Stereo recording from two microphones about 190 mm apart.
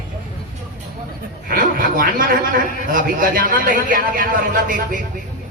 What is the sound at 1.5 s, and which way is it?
A man's voice, 50° right (ahead or behind).